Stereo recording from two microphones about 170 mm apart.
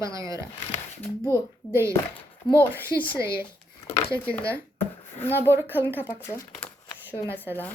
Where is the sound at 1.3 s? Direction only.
15° right (ahead or behind).